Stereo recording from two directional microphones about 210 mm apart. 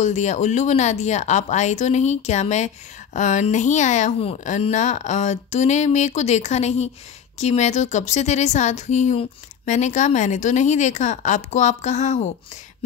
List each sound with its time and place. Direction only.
0.0 s speech: 35° left (ahead or behind)